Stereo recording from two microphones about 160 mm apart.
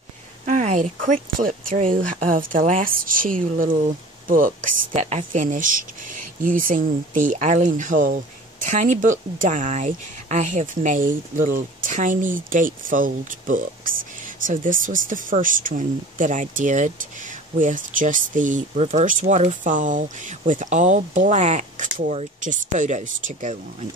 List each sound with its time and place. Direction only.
0.5 s speech: 50° right (ahead or behind)